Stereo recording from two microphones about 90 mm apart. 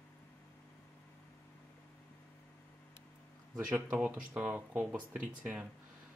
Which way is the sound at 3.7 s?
20° right (ahead or behind).